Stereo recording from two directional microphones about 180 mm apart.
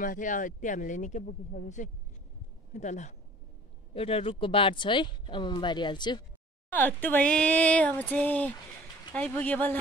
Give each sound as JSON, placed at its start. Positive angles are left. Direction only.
{"t": 0.0, "sound": "speech", "side_deg": 45}
{"t": 6.7, "sound": "speech", "side_deg": 10}